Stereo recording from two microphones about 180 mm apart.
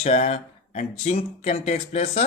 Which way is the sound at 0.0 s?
35° left (ahead or behind).